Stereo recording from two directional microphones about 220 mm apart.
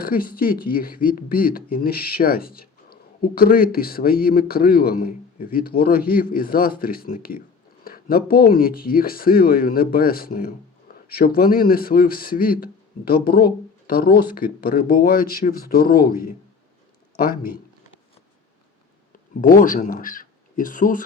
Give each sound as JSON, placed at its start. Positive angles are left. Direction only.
{"t": 0.0, "sound": "speech", "side_deg": 40}
{"t": 17.2, "sound": "speech", "side_deg": 40}
{"t": 19.3, "sound": "speech", "side_deg": 40}